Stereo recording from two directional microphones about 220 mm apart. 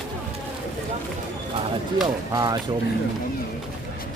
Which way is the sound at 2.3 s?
15° right (ahead or behind).